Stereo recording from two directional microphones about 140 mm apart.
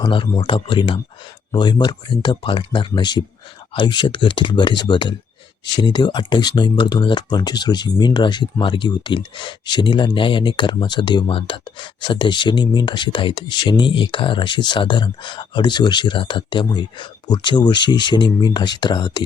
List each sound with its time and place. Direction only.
0.0 s speech: 35° left (ahead or behind)